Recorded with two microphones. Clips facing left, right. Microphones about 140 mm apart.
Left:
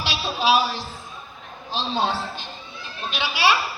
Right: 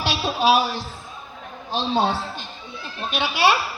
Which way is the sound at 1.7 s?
50° right (ahead or behind).